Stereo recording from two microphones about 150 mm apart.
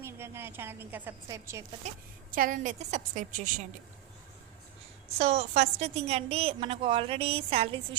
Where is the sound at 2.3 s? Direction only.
65° right (ahead or behind).